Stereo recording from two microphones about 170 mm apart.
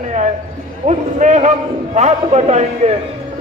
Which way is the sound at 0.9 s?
45° right (ahead or behind).